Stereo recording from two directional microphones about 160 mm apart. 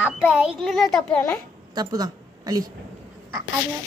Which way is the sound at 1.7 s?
25° right (ahead or behind).